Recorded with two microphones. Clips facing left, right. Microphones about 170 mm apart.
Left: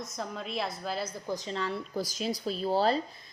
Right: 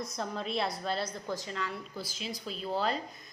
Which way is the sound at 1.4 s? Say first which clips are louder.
Left 3 dB; 25° left (ahead or behind).